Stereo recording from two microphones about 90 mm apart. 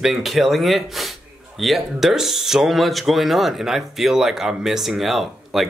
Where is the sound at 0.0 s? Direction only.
Centre (ahead or behind).